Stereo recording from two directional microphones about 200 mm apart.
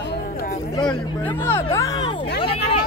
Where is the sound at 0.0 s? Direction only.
50° left (ahead or behind).